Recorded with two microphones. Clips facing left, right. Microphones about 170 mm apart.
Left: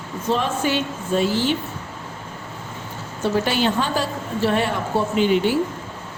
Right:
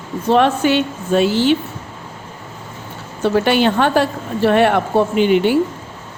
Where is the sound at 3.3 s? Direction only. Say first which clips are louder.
Right 6 dB; 65° right (ahead or behind).